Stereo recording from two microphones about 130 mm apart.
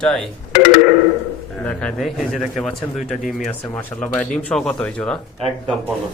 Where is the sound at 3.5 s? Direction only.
15° left (ahead or behind).